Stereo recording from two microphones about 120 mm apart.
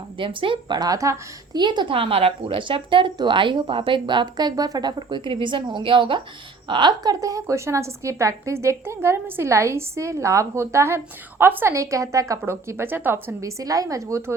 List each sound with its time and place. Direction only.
0.2 s a woman's voice: 45° right (ahead or behind); by 1.2 s 25° right (ahead or behind)
1.5 s a woman's voice: 40° right (ahead or behind); by 14.3 s 20° right (ahead or behind)